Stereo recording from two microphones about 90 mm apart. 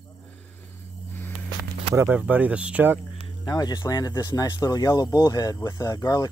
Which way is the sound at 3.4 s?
50° left (ahead or behind).